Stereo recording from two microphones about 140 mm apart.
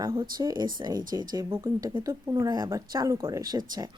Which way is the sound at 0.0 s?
30° right (ahead or behind).